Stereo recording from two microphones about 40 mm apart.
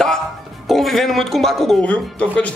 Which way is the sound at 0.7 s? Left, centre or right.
Centre.